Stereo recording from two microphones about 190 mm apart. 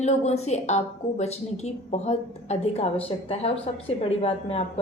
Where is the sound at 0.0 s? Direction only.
35° left (ahead or behind).